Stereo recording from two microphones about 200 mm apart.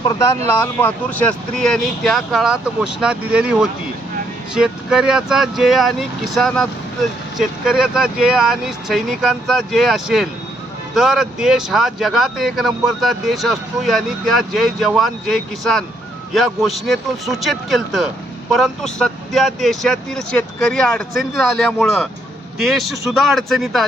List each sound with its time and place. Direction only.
0.0 s speech: 20° left (ahead or behind)
0.4 s speech: 10° left (ahead or behind)